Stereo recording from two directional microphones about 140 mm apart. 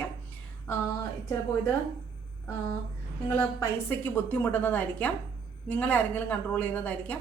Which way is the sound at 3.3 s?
15° left (ahead or behind).